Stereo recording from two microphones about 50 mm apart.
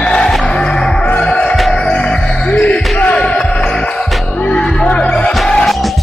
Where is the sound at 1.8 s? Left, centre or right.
Centre.